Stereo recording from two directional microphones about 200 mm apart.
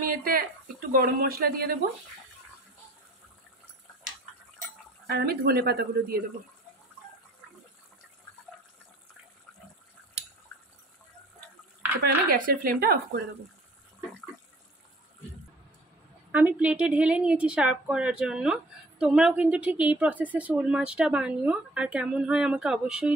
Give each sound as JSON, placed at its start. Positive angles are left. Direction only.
{"t": 0.0, "sound": "a woman's voice", "side_deg": -45}
{"t": 5.0, "sound": "a woman's voice", "side_deg": -50}
{"t": 12.0, "sound": "a woman's voice", "side_deg": -45}
{"t": 16.3, "sound": "a woman's voice", "side_deg": -5}